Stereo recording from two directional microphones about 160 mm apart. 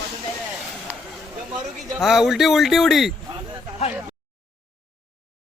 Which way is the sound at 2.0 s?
Centre (ahead or behind).